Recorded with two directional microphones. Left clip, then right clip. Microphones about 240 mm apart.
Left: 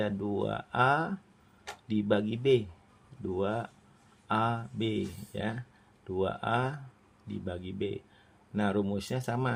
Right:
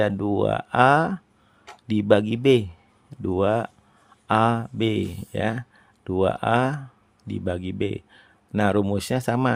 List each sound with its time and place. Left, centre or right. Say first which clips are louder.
0.0 s speech: right 10 dB; right